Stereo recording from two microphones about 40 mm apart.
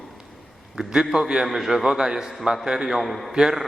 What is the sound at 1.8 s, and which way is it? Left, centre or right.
A man's voice, centre.